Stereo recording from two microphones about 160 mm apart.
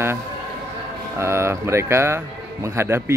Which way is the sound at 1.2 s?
15° right (ahead or behind).